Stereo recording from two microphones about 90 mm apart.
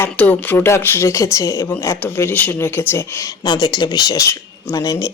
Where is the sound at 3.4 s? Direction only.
55° left (ahead or behind).